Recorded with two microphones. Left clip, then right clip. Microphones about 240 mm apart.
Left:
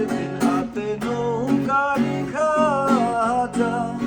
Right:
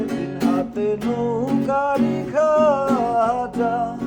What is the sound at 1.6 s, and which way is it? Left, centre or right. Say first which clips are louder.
Music: right 1 dB; right.